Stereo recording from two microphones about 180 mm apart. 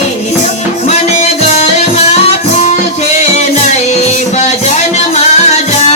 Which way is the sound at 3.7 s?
40° left (ahead or behind).